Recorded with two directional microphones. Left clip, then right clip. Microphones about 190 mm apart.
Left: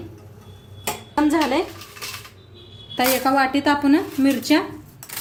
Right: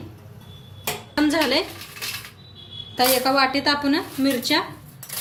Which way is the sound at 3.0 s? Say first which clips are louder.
Even; 40° left (ahead or behind).